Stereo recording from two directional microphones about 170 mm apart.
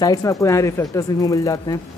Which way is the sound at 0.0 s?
20° left (ahead or behind).